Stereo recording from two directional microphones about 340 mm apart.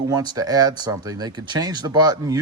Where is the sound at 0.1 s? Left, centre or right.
Centre.